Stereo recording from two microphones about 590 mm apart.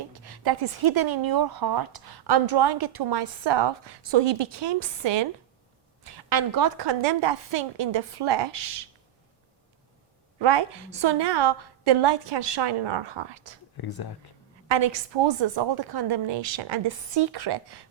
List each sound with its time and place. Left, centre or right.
0.1 s a woman's voice: right
10.4 s a woman's voice: right
13.8 s speech: left
14.7 s a woman's voice: right